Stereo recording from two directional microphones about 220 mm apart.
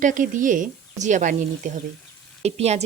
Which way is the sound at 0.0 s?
35° right (ahead or behind).